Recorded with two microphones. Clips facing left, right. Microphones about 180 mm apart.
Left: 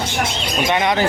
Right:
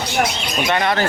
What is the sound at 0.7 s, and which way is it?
Speech, 15° left (ahead or behind).